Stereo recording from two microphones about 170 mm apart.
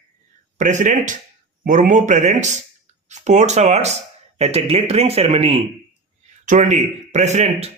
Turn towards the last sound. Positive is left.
turn(degrees=-40)  # may be behind; listen again after turning